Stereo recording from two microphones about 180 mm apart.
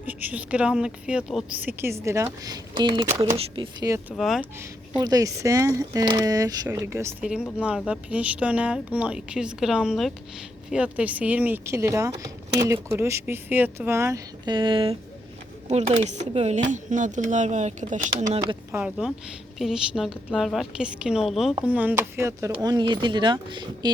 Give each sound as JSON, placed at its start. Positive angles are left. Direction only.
{"t": 0.0, "sound": "a woman's voice", "side_deg": -10}
{"t": 3.8, "sound": "a woman's voice", "side_deg": -15}
{"t": 4.1, "sound": "speech", "side_deg": 5}
{"t": 4.9, "sound": "a woman's voice", "side_deg": -20}
{"t": 15.7, "sound": "speech", "side_deg": -40}
{"t": 19.5, "sound": "speech", "side_deg": 0}